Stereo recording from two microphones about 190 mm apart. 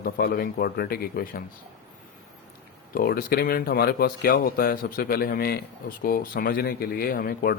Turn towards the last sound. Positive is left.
turn(degrees=50)  # may be behind; listen again after turning